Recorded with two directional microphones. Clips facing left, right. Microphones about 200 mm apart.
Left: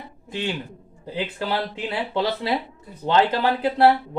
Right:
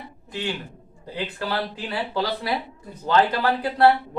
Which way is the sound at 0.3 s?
20° left (ahead or behind).